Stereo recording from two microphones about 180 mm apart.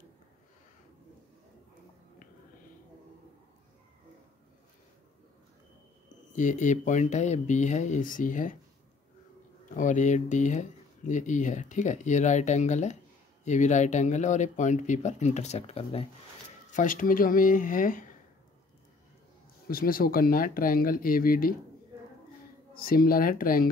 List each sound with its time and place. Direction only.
6.3 s speech: 45° left (ahead or behind)
9.8 s speech: 45° left (ahead or behind)
16.7 s speech: 50° left (ahead or behind)
19.7 s speech: 55° left (ahead or behind)
22.8 s speech: 55° left (ahead or behind)